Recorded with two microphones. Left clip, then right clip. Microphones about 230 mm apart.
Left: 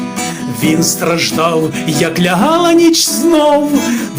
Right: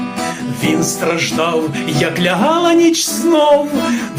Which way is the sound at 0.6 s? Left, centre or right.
Left.